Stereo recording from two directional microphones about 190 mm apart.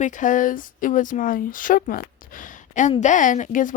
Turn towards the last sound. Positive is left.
turn(degrees=45)  # may be behind; listen again after turning